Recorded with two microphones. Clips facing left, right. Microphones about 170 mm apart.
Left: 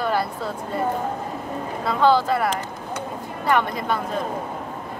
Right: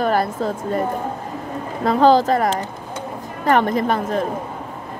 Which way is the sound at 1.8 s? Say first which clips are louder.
Right 5 dB; 40° right (ahead or behind).